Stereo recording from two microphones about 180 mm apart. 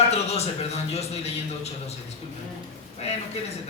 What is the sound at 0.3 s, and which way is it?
Speech, 35° left (ahead or behind).